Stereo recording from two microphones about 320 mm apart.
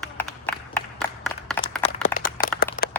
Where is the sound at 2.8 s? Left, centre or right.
Left.